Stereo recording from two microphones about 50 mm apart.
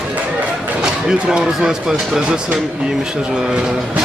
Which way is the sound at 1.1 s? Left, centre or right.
Centre.